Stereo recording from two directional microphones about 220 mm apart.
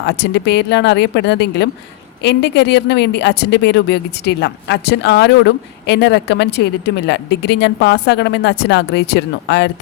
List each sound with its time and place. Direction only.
0.0 s speech: 50° left (ahead or behind)